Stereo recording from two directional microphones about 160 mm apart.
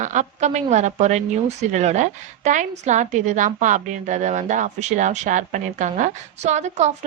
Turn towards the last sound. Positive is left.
turn(degrees=-45)  # may be behind; listen again after turning